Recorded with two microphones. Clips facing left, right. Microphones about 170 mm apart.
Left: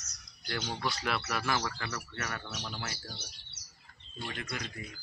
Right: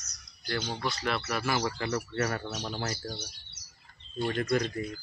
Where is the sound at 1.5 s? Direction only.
25° right (ahead or behind).